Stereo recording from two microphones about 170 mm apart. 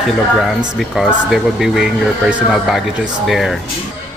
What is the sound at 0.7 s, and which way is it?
Speech, centre (ahead or behind).